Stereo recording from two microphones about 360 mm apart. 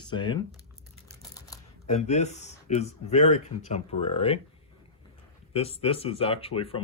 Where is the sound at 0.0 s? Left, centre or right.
Centre.